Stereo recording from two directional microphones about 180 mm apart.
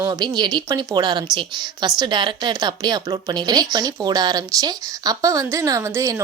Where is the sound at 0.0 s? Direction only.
25° right (ahead or behind).